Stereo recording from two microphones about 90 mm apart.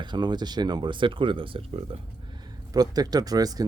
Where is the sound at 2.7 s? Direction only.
45° right (ahead or behind).